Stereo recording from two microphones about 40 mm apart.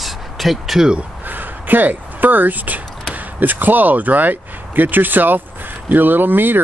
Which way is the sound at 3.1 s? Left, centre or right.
Right.